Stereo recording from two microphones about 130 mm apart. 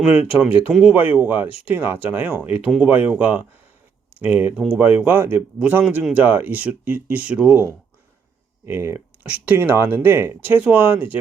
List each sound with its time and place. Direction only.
0.0 s speech: 10° right (ahead or behind)